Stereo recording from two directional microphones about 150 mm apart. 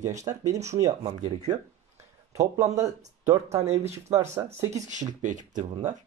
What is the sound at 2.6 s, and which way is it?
Speech, 50° right (ahead or behind).